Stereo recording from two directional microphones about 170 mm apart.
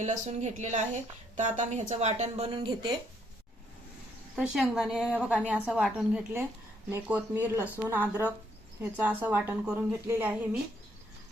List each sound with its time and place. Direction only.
0.0 s a woman's voice: 45° right (ahead or behind)
2.3 s speech: 30° right (ahead or behind)
4.4 s a woman's voice: 5° right (ahead or behind)